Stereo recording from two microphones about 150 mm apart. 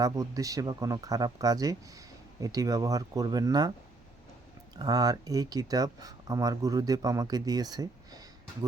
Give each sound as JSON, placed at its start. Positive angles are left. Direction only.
{"t": 0.0, "sound": "speech", "side_deg": -25}
{"t": 4.8, "sound": "speech", "side_deg": -25}